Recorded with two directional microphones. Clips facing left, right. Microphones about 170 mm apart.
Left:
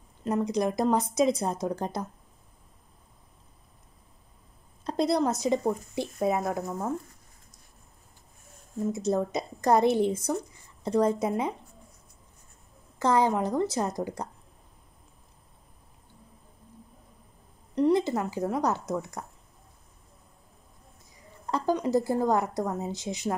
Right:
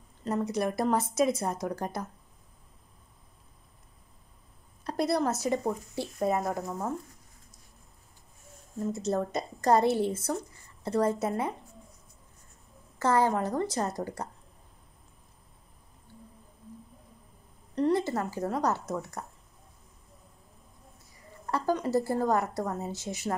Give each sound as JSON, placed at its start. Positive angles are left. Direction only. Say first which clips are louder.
{"t": 0.2, "sound": "a woman's voice", "louder": "left 3 dB", "side_deg": 15}
{"t": 4.8, "sound": "a woman's voice", "louder": "left 2 dB", "side_deg": 20}
{"t": 6.1, "sound": "a woman's voice", "louder": "left 1 dB", "side_deg": 5}
{"t": 8.9, "sound": "a woman's voice", "louder": "left 2 dB", "side_deg": 10}
{"t": 13.0, "sound": "a woman's voice", "louder": "left 1 dB", "side_deg": 15}
{"t": 17.7, "sound": "a woman's voice", "louder": "left 3 dB", "side_deg": 15}
{"t": 21.5, "sound": "a woman's voice", "louder": "left 2 dB", "side_deg": 15}